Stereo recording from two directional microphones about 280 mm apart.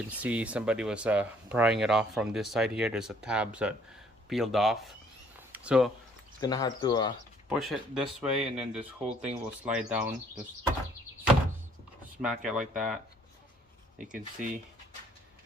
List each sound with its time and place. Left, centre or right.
0.1 s speech: centre
5.4 s a sound: centre
6.4 s speech: centre
7.5 s speech: centre
8.8 s speech: right
9.3 s speech: centre
12.2 s speech: centre
14.4 s speech: centre